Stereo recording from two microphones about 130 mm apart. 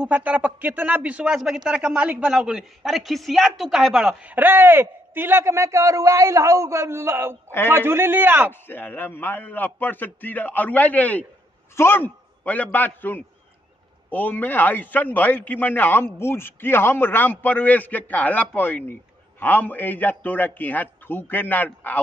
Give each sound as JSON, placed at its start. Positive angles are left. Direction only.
{"t": 0.0, "sound": "a man's voice", "side_deg": -10}
{"t": 8.6, "sound": "a man's voice", "side_deg": 15}